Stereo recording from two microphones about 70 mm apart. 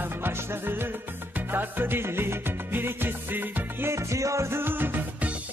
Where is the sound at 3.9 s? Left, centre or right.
Right.